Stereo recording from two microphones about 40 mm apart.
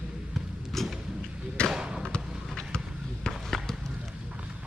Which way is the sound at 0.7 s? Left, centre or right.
Centre.